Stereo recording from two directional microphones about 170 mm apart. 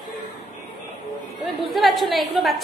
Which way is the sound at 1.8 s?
Centre (ahead or behind).